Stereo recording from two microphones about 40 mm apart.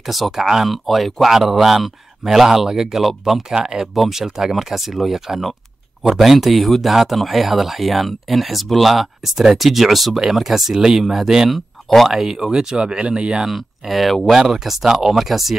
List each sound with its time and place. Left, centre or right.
0.0 s speech: centre
0.8 s speech: centre
3.9 s speech: centre
11.5 s speech: centre
12.2 s speech: centre
12.7 s speech: right
13.5 s speech: centre